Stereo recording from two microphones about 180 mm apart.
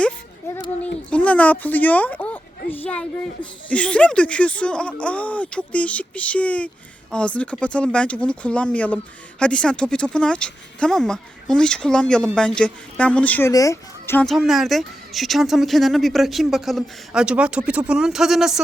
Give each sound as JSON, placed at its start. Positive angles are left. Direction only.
{"t": 0.4, "sound": "child singing", "side_deg": 15}
{"t": 1.1, "sound": "a woman's voice", "side_deg": 5}
{"t": 14.3, "sound": "speech", "side_deg": 0}